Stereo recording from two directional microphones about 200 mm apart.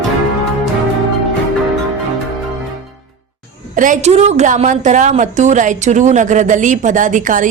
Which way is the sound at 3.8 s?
40° right (ahead or behind).